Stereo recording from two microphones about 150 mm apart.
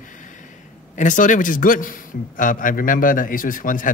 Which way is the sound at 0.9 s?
60° left (ahead or behind).